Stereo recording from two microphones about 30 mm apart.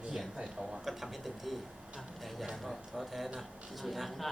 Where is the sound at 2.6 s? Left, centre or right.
Centre.